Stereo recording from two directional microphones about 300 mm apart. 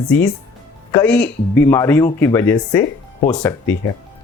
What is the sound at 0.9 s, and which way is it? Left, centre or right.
Speech, centre.